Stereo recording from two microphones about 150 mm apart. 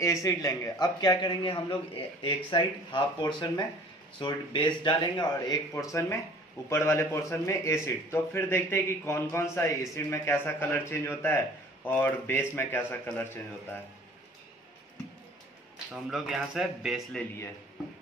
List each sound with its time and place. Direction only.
0.0 s a man's voice: 20° left (ahead or behind)
15.9 s speech: 5° right (ahead or behind)